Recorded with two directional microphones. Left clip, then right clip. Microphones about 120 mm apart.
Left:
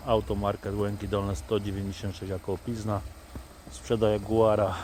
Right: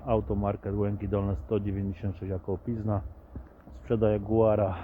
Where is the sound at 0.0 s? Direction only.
15° left (ahead or behind).